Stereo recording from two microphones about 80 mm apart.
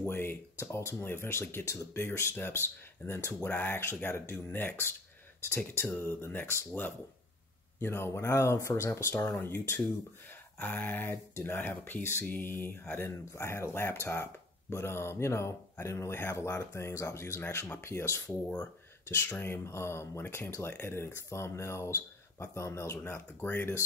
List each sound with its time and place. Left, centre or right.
0.0 s speech: left
7.8 s speech: left